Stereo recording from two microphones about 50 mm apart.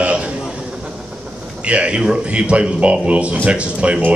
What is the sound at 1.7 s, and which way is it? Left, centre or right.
Speech, right.